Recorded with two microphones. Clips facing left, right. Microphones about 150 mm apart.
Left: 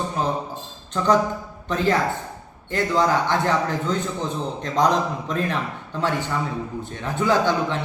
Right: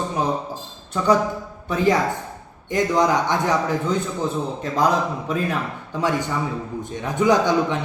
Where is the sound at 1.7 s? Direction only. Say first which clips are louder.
Right 2 dB; 10° right (ahead or behind).